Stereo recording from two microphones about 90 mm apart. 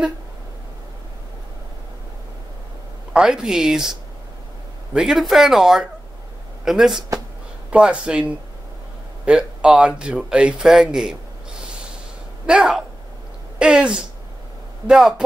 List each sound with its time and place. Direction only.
3.1 s speech: 10° right (ahead or behind)
12.4 s speech: 10° right (ahead or behind)